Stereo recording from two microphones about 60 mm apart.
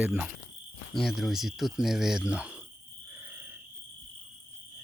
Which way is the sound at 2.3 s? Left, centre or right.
Centre.